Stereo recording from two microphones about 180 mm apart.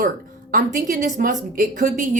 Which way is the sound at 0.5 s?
45° right (ahead or behind).